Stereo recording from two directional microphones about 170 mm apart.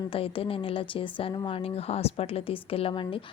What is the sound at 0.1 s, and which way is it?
Speech, 30° left (ahead or behind).